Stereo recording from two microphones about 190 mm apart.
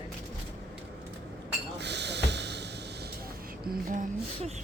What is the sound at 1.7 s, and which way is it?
Snort, 65° right (ahead or behind).